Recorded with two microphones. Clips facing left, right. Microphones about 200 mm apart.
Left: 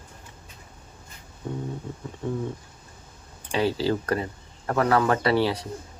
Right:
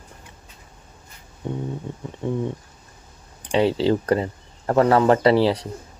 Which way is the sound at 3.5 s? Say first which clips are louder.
Right 5 dB; 25° right (ahead or behind).